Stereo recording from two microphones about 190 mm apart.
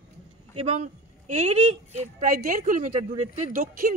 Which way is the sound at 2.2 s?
45° right (ahead or behind).